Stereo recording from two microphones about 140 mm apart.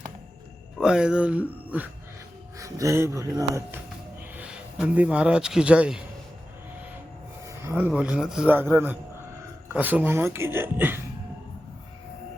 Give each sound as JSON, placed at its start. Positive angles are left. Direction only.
{"t": 0.8, "sound": "speech", "side_deg": -5}
{"t": 2.6, "sound": "speech", "side_deg": -25}
{"t": 4.4, "sound": "speech", "side_deg": -10}
{"t": 7.4, "sound": "a sound", "side_deg": -15}
{"t": 7.9, "sound": "speech", "side_deg": -5}